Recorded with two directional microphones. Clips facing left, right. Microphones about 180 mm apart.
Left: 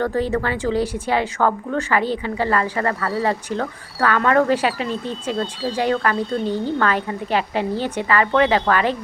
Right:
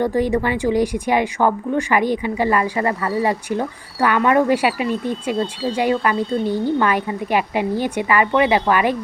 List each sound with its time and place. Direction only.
0.0 s a woman's voice: 15° right (ahead or behind)